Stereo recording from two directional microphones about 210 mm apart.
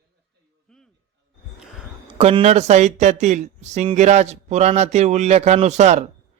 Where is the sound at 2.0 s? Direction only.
25° right (ahead or behind).